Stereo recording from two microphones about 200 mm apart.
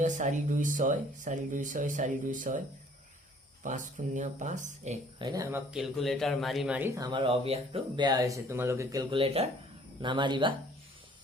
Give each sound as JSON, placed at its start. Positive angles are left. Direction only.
{"t": 0.0, "sound": "speech", "side_deg": -35}
{"t": 3.6, "sound": "speech", "side_deg": -40}
{"t": 5.2, "sound": "speech", "side_deg": -20}